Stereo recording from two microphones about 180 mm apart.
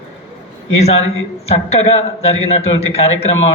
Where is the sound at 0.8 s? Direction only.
35° left (ahead or behind).